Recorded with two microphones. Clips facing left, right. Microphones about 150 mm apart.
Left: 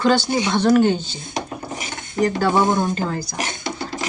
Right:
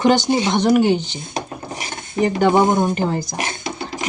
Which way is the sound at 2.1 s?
20° right (ahead or behind).